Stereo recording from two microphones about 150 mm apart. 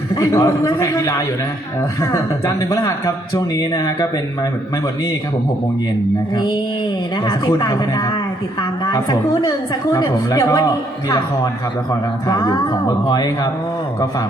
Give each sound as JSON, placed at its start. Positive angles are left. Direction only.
{"t": 0.2, "sound": "a woman's voice", "side_deg": 20}
{"t": 2.6, "sound": "a woman's voice", "side_deg": 20}
{"t": 7.3, "sound": "a woman's voice", "side_deg": 25}
{"t": 8.9, "sound": "a woman's voice", "side_deg": 20}
{"t": 12.3, "sound": "a woman's voice", "side_deg": 25}